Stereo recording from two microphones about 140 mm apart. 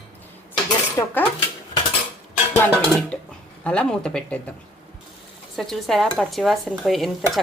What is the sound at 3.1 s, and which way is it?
Dishes, 5° left (ahead or behind).